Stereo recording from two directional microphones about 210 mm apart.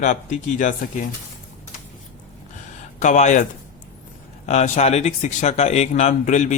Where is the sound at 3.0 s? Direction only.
35° left (ahead or behind).